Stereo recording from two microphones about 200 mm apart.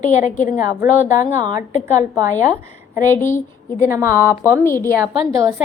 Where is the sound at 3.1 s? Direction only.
10° left (ahead or behind).